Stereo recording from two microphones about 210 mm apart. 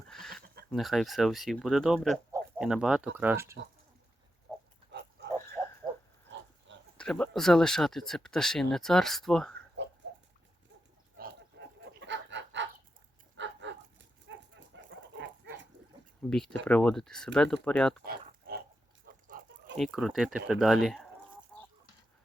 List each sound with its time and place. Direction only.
0.1 s a sound: centre (ahead or behind)
0.7 s speech: centre (ahead or behind)
4.5 s pig: centre (ahead or behind)
4.9 s pig: 55° right (ahead or behind)
5.6 s a sound: 10° right (ahead or behind)
6.9 s speech: 5° left (ahead or behind)
9.8 s pig: 55° right (ahead or behind)
11.2 s pig: 55° right (ahead or behind)
13.3 s dog: 60° right (ahead or behind)
16.3 s speech: centre (ahead or behind)
18.0 s pig: 45° right (ahead or behind)
19.3 s chicken: 40° right (ahead or behind)
19.7 s speech: centre (ahead or behind)
21.5 s chicken: centre (ahead or behind)